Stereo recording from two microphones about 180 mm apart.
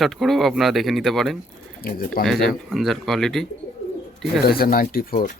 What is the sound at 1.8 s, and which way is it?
Speech, 55° left (ahead or behind).